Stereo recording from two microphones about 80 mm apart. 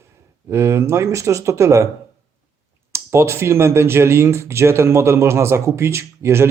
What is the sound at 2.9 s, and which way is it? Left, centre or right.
Speech, right.